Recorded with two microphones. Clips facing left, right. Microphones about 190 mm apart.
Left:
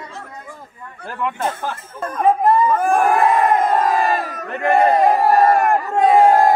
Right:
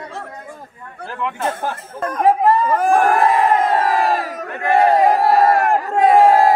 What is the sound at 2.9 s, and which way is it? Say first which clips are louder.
Crowd: right 1 dB; centre (ahead or behind).